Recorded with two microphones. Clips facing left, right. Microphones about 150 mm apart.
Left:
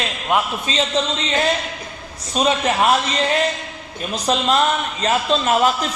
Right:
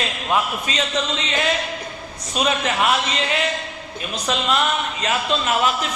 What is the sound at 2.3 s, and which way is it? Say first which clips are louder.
A man's voice: left 3 dB; 35° left (ahead or behind).